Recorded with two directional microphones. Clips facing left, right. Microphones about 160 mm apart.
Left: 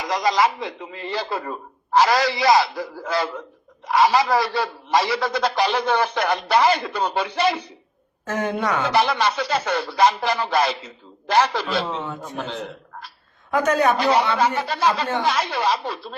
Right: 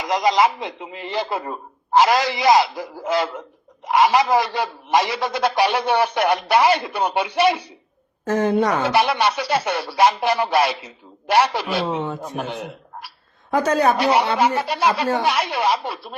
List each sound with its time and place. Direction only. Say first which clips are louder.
0.0 s a man's voice: right 2 dB; 20° right (ahead or behind)
8.3 s a woman's voice: right 5 dB; 35° right (ahead or behind)
8.9 s a man's voice: right 1 dB; 10° right (ahead or behind)
12.0 s a woman's voice: right 4 dB; 35° right (ahead or behind)
12.4 s a man's voice: right 1 dB; 10° right (ahead or behind)
13.5 s a woman's voice: right 1 dB; 35° right (ahead or behind)
14.3 s a man's voice: right 2 dB; 15° right (ahead or behind)